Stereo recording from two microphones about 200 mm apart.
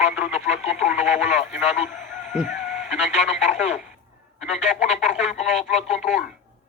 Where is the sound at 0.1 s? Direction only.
5° right (ahead or behind).